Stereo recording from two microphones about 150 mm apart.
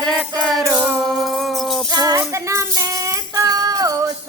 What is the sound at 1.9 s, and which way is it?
Music, 25° right (ahead or behind).